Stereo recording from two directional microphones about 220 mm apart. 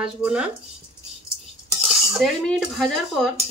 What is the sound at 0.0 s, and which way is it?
Speech, 5° right (ahead or behind).